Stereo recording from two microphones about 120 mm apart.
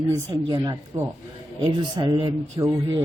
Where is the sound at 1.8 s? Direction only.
40° right (ahead or behind).